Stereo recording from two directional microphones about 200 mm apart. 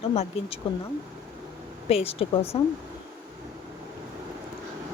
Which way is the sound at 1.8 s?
30° left (ahead or behind).